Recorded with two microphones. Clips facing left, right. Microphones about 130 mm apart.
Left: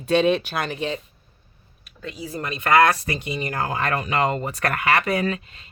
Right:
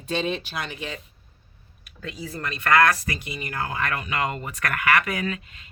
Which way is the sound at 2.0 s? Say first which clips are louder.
Left 2 dB; 5° left (ahead or behind).